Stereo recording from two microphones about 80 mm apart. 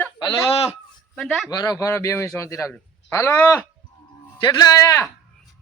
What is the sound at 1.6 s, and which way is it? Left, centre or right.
A man's voice, left.